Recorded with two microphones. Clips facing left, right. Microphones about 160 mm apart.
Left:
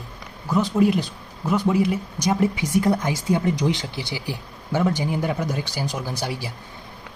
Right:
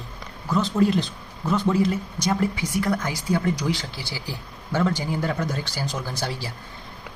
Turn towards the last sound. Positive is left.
turn(degrees=15)  # may be behind; listen again after turning